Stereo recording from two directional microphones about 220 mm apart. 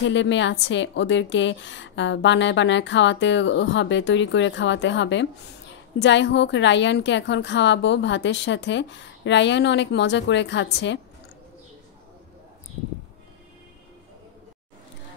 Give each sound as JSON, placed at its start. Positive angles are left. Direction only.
{"t": 0.0, "sound": "a woman's voice", "side_deg": 55}